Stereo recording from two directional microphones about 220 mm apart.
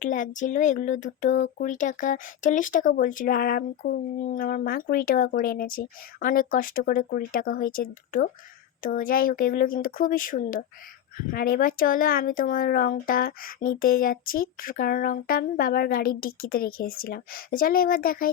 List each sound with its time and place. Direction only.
0.0 s speech: 35° left (ahead or behind)